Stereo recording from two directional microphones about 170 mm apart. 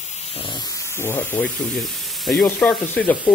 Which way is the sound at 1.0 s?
10° left (ahead or behind).